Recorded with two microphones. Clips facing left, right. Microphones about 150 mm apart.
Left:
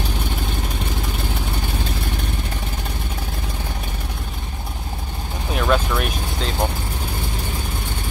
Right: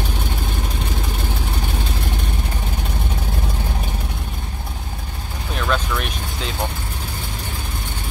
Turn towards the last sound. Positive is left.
turn(degrees=10)  # may be behind; listen again after turning